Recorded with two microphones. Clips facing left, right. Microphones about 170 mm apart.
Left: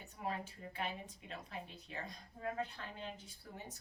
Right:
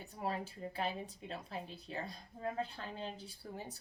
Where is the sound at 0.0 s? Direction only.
35° right (ahead or behind).